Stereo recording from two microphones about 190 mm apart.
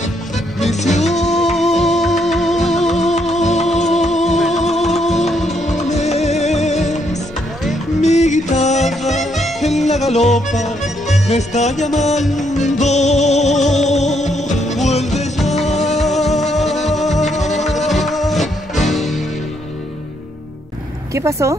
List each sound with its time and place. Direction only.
0.7 s music: 35° left (ahead or behind)
1.4 s music: centre (ahead or behind)
3.0 s music: 35° left (ahead or behind)
5.2 s music: centre (ahead or behind)
5.6 s music: 35° left (ahead or behind)
8.0 s music: 35° left (ahead or behind)
9.3 s music: centre (ahead or behind)
9.7 s music: 35° left (ahead or behind)
17.8 s music: centre (ahead or behind)
21.1 s speech: 15° right (ahead or behind)